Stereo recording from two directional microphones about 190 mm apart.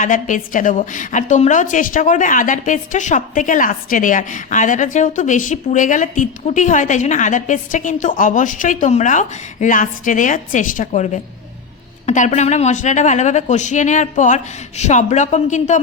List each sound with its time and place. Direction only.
0.0 s a woman's voice: 40° left (ahead or behind)